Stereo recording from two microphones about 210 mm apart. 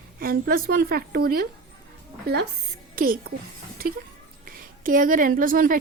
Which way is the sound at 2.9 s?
45° right (ahead or behind).